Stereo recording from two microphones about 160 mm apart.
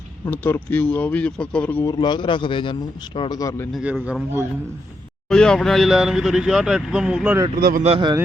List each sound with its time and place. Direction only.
0.3 s speech: 10° left (ahead or behind)
1.8 s a man's voice: 25° left (ahead or behind)
3.7 s speech: centre (ahead or behind)
5.3 s speech: 5° left (ahead or behind)
7.5 s speech: 60° right (ahead or behind)
7.9 s a man's voice: 35° right (ahead or behind)